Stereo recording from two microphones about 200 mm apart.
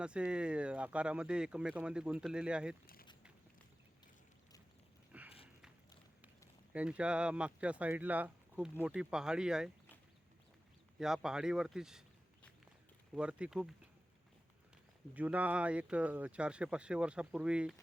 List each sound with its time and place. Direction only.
0.0 s speech: 5° right (ahead or behind)
2.8 s speech: 45° left (ahead or behind)
5.1 s a sound: 5° right (ahead or behind)
6.7 s speech: 5° right (ahead or behind)
11.0 s speech: 5° right (ahead or behind)
15.1 s speech: 5° right (ahead or behind)